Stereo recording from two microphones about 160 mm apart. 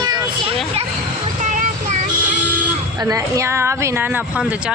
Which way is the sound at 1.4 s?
50° right (ahead or behind).